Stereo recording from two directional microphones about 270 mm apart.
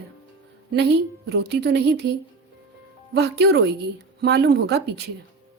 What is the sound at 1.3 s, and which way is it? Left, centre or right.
Speech, right.